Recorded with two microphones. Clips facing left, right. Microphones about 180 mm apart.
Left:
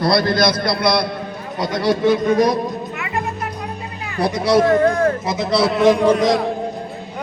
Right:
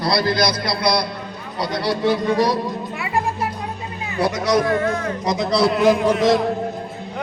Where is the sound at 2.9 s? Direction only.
30° right (ahead or behind).